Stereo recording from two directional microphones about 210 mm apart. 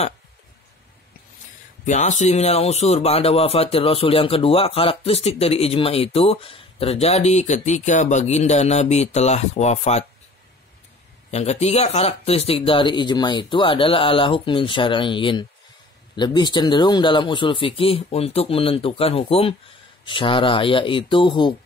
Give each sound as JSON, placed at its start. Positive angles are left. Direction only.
{"t": 1.9, "sound": "speech", "side_deg": 35}
{"t": 11.2, "sound": "speech", "side_deg": 30}